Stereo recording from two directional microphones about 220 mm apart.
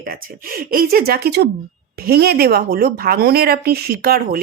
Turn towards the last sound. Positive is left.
turn(degrees=-45)  # may be behind; listen again after turning